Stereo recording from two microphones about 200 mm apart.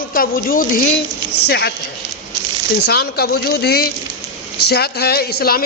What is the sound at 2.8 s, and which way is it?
A woman's voice, 50° left (ahead or behind).